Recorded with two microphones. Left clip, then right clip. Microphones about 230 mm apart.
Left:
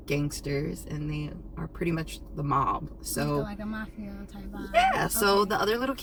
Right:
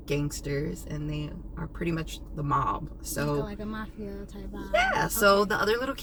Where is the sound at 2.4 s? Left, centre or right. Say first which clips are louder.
Left 1 dB; centre.